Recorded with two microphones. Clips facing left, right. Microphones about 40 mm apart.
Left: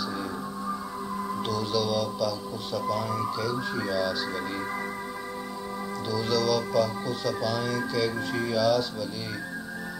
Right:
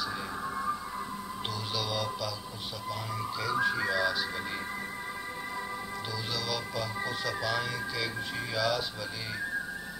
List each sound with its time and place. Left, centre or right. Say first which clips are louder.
1.5 s speech: left 7 dB; centre
3.6 s speech: even; centre
6.1 s speech: left 11 dB; centre